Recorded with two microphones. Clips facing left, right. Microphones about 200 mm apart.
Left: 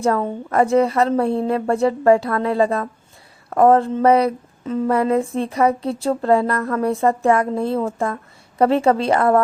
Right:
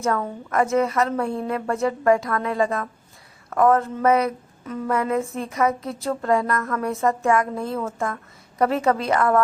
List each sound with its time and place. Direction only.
0.0 s speech: 30° left (ahead or behind)